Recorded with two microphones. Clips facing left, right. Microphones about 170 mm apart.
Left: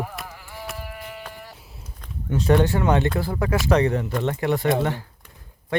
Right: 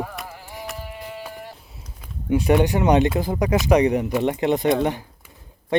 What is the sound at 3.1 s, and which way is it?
Speech, 20° right (ahead or behind).